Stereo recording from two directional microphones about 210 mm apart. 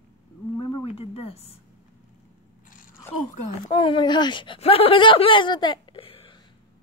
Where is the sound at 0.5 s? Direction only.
25° left (ahead or behind).